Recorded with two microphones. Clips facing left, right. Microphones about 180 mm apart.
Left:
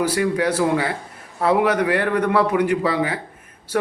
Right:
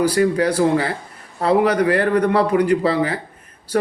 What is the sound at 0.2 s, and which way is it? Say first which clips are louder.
Speech: right 3 dB; 40° right (ahead or behind).